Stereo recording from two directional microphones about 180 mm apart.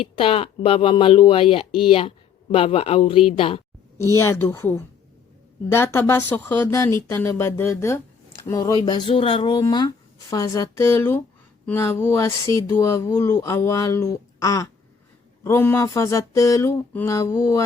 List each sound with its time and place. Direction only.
0.0 s speech: 30° left (ahead or behind)
3.9 s speech: 15° left (ahead or behind)